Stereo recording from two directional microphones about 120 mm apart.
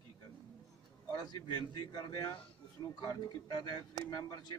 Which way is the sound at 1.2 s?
35° left (ahead or behind).